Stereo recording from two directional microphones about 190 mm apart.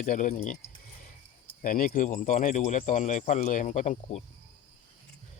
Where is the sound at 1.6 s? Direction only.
45° left (ahead or behind).